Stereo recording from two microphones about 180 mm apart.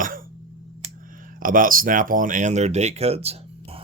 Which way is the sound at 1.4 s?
50° right (ahead or behind).